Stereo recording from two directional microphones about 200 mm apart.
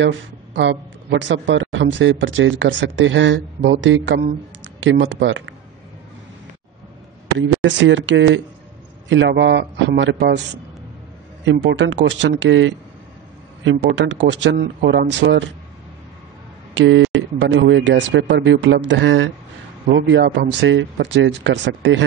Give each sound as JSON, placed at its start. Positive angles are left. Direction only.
{"t": 0.0, "sound": "speech", "side_deg": -65}
{"t": 7.6, "sound": "speech", "side_deg": -65}
{"t": 11.5, "sound": "speech", "side_deg": -60}
{"t": 16.7, "sound": "speech", "side_deg": -70}